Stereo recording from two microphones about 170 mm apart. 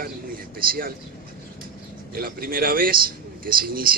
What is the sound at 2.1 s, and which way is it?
A man's voice, 60° right (ahead or behind).